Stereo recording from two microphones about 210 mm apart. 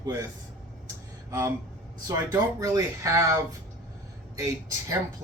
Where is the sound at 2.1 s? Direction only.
15° right (ahead or behind).